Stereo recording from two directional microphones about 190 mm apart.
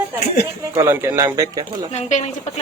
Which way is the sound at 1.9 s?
40° left (ahead or behind).